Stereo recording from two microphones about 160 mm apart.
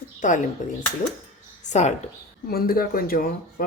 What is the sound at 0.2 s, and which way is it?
Speech, 55° left (ahead or behind).